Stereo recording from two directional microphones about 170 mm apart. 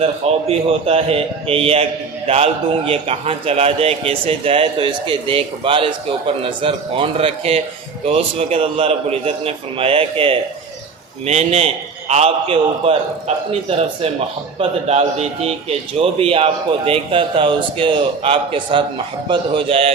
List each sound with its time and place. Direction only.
0.0 s a man's voice: 35° right (ahead or behind)